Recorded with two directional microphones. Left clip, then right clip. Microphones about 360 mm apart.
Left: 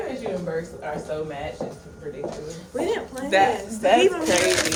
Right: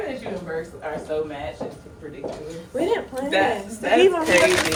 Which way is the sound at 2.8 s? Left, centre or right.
Centre.